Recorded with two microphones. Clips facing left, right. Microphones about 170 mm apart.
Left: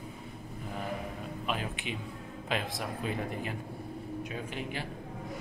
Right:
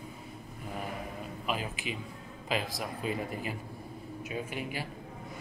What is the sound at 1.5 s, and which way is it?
A man's voice, 5° right (ahead or behind).